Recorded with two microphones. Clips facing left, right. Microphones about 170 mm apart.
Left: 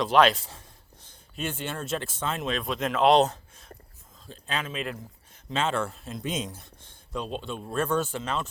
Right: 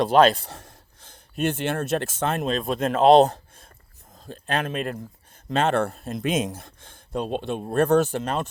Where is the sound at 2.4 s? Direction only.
40° right (ahead or behind).